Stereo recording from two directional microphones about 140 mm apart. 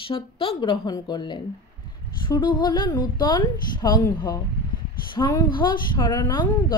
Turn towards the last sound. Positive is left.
turn(degrees=30)  # may be behind; listen again after turning